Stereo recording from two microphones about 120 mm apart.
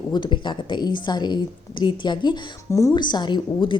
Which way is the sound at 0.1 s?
40° left (ahead or behind).